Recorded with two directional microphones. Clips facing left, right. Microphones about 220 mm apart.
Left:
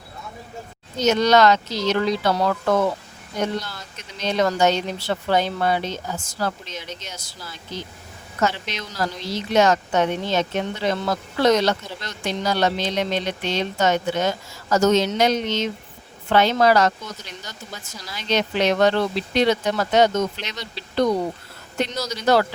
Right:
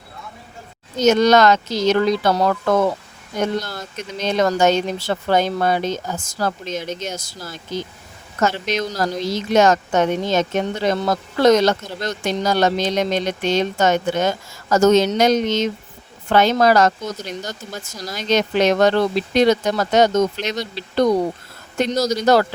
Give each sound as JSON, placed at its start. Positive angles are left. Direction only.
{"t": 0.9, "sound": "a woman's voice", "side_deg": -45}
{"t": 3.6, "sound": "a woman's voice", "side_deg": -45}